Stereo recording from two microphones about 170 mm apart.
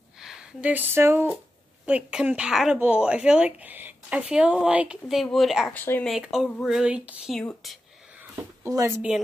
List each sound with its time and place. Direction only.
0.2 s speech: 5° right (ahead or behind)
5.7 s speech: 10° left (ahead or behind)
6.1 s speech: centre (ahead or behind)
8.2 s a sound: 20° right (ahead or behind)